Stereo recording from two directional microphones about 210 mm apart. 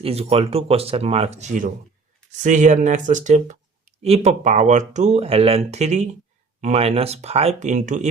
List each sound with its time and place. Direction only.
0.0 s speech: 30° right (ahead or behind)